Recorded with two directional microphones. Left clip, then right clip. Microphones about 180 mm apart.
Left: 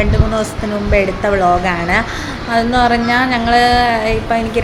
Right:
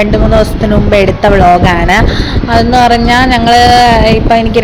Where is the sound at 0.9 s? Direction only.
45° right (ahead or behind).